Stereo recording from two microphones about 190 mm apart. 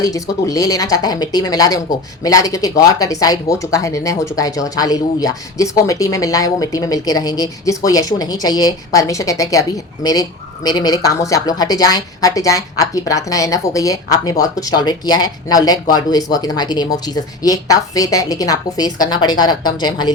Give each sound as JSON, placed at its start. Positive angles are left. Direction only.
{"t": 0.0, "sound": "a woman's voice", "side_deg": 15}